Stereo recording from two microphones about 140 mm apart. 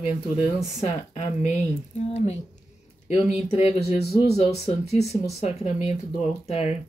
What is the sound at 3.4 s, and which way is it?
Speech, 50° left (ahead or behind).